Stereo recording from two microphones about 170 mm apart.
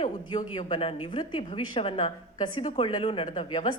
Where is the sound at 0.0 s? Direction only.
25° left (ahead or behind).